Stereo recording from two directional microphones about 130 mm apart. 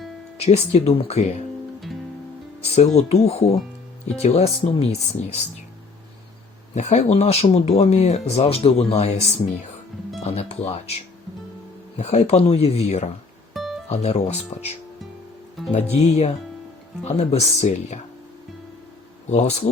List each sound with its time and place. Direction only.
0.3 s speech: 55° left (ahead or behind)
2.6 s speech: 55° left (ahead or behind)
6.7 s speech: 55° left (ahead or behind)
10.2 s speech: 50° left (ahead or behind)
13.5 s music: centre (ahead or behind)
13.8 s speech: 55° left (ahead or behind)
15.7 s speech: 50° left (ahead or behind)
19.3 s speech: 60° left (ahead or behind)